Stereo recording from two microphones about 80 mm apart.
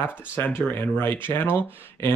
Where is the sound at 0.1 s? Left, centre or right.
Left.